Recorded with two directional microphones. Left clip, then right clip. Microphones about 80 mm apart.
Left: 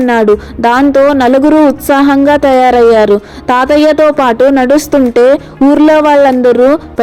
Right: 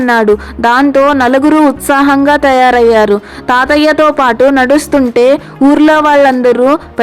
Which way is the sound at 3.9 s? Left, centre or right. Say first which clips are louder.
Left 1 dB; centre.